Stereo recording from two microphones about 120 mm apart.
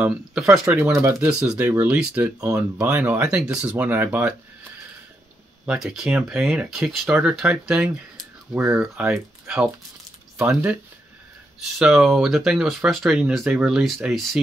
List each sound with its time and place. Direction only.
0.0 s speech: 10° right (ahead or behind)
5.7 s speech: 5° right (ahead or behind)
11.8 s speech: centre (ahead or behind)